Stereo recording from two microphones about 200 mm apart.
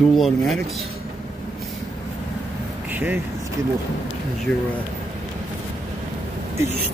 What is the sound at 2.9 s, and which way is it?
Vehicle, 10° right (ahead or behind).